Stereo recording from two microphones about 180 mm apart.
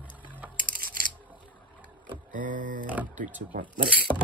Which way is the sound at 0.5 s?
55° right (ahead or behind).